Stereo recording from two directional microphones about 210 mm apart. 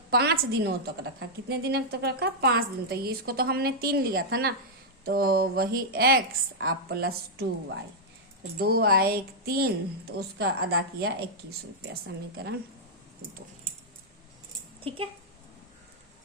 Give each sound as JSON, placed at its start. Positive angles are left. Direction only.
{"t": 0.1, "sound": "a woman's voice", "side_deg": -50}